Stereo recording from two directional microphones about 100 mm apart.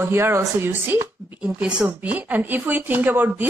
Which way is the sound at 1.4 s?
10° right (ahead or behind).